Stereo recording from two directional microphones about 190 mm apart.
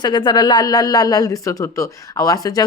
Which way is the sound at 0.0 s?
25° left (ahead or behind).